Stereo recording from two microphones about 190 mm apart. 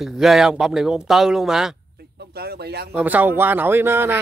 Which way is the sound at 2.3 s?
55° right (ahead or behind).